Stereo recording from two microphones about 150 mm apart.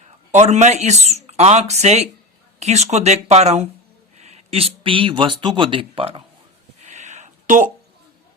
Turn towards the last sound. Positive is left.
turn(degrees=-60)  # may be behind; listen again after turning